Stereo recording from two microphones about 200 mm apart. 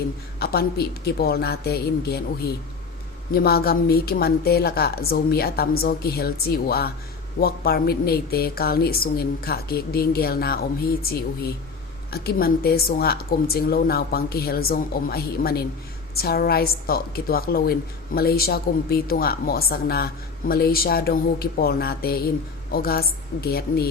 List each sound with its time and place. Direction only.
0.3 s a woman's voice: 50° left (ahead or behind)